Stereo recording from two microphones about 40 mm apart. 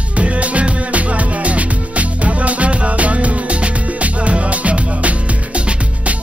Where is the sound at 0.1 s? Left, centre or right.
Right.